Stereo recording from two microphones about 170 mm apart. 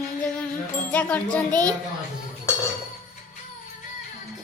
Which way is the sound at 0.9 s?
10° left (ahead or behind).